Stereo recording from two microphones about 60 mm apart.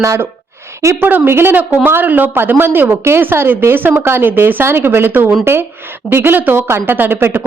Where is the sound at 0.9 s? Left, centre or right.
Right.